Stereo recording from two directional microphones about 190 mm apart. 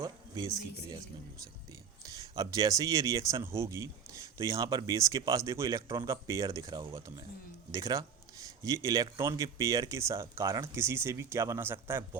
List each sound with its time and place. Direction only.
0.0 s speech: 20° right (ahead or behind)
2.0 s speech: 20° right (ahead or behind)